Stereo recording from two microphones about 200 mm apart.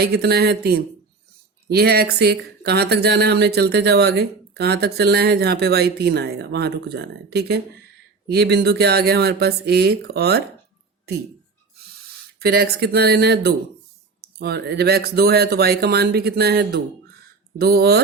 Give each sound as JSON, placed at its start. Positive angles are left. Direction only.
{"t": 0.0, "sound": "speech", "side_deg": -55}
{"t": 12.4, "sound": "speech", "side_deg": -50}